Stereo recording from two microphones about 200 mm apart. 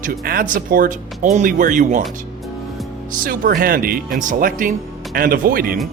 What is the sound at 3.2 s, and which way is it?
Speech, 50° right (ahead or behind).